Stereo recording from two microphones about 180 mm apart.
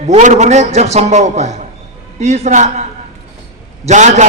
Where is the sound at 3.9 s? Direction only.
40° right (ahead or behind).